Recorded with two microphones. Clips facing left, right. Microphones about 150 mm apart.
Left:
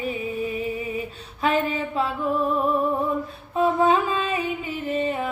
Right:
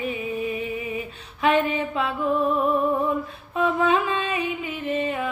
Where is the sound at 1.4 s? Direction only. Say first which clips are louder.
Right 2 dB; 35° left (ahead or behind).